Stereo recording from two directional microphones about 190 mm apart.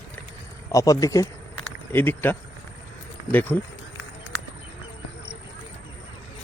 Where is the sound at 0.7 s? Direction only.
15° left (ahead or behind).